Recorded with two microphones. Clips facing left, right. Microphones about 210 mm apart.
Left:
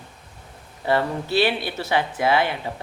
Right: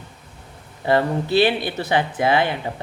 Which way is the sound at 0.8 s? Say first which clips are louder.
Right 3 dB; 20° right (ahead or behind).